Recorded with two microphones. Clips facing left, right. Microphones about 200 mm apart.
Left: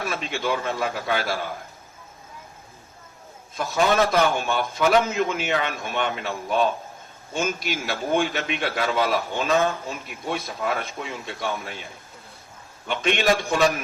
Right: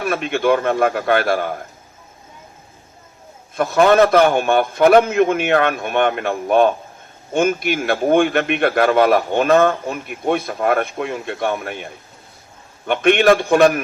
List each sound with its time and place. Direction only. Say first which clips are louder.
0.0 s a man's voice: right 9 dB; 60° right (ahead or behind)
3.5 s a man's voice: right 8 dB; 55° right (ahead or behind)
12.9 s a man's voice: right 9 dB; 55° right (ahead or behind)